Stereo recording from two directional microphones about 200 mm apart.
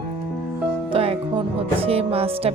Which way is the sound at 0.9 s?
30° right (ahead or behind).